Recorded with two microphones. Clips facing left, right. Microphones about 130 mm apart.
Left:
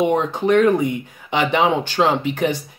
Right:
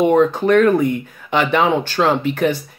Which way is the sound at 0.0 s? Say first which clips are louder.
Right 4 dB; 20° left (ahead or behind).